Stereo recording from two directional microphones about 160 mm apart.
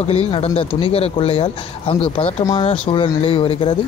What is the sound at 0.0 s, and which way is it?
Speech, 40° left (ahead or behind).